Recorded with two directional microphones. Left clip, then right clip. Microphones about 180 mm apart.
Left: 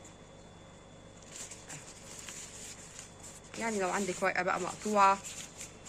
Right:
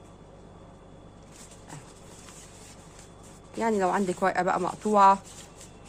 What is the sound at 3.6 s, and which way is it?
Speech, 55° right (ahead or behind).